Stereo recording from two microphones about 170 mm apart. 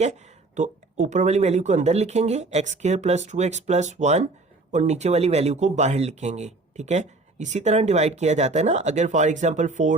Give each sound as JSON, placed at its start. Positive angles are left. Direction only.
{"t": 0.0, "sound": "speech", "side_deg": -45}